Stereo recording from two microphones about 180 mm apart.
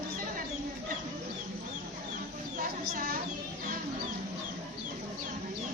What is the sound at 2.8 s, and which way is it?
Speech, 55° right (ahead or behind).